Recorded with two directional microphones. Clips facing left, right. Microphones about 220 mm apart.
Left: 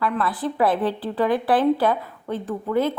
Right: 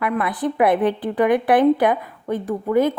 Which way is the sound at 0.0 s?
20° right (ahead or behind).